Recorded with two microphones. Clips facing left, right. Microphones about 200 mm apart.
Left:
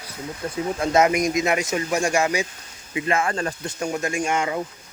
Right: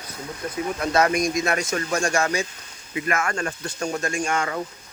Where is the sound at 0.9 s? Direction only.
20° left (ahead or behind).